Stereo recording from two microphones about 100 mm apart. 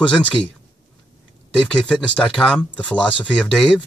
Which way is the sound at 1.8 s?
5° left (ahead or behind).